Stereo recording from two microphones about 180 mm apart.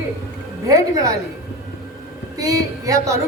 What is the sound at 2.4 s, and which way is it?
Speech, 20° right (ahead or behind).